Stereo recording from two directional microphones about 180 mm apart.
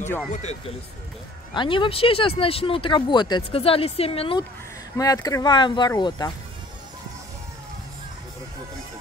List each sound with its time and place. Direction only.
0.3 s speech: 40° left (ahead or behind)
1.5 s speech: 25° left (ahead or behind)
4.9 s speech: 20° left (ahead or behind)